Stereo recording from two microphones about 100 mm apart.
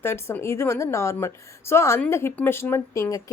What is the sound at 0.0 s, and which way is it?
Speech, 25° left (ahead or behind).